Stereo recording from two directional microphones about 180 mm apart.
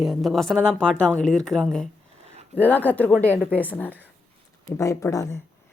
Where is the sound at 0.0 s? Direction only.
Centre (ahead or behind).